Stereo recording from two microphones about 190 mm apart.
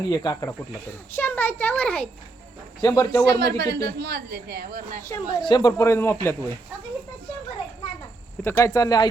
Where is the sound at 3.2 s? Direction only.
60° right (ahead or behind).